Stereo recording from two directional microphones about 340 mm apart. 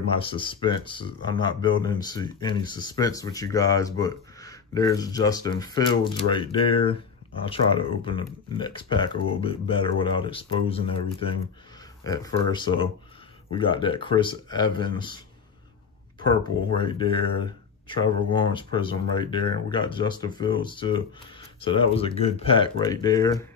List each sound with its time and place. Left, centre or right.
0.1 s speech: centre
16.2 s speech: centre